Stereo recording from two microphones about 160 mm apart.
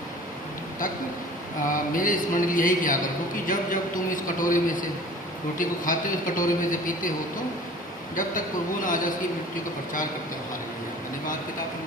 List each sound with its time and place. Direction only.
1.6 s a man's voice: 55° left (ahead or behind)
8.1 s a man's voice: 55° left (ahead or behind)